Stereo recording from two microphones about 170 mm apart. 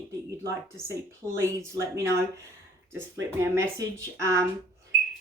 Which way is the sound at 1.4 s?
15° right (ahead or behind).